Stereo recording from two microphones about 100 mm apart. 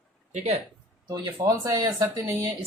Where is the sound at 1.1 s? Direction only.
45° right (ahead or behind).